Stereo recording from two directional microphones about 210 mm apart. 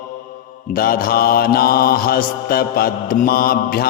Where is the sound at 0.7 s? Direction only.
45° left (ahead or behind).